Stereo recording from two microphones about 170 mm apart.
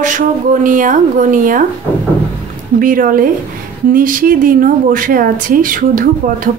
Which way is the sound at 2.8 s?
55° right (ahead or behind).